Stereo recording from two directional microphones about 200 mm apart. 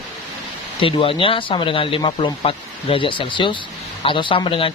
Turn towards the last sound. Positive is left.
turn(degrees=25)  # may be behind; listen again after turning